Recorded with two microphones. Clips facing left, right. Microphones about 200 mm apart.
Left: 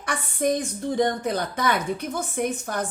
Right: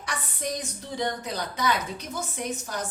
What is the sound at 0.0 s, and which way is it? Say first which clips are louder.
A woman's voice: left 8 dB; 55° left (ahead or behind).